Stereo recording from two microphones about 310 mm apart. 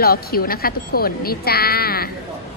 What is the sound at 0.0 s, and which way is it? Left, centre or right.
Speech, left.